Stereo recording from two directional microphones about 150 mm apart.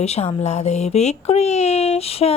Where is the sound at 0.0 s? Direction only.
45° left (ahead or behind).